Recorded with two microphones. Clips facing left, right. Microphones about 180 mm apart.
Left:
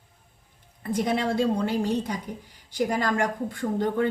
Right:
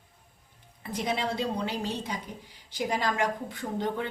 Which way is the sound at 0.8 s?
50° left (ahead or behind).